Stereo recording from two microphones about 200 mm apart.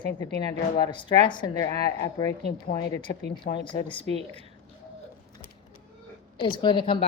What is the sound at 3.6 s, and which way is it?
Speech, 25° left (ahead or behind).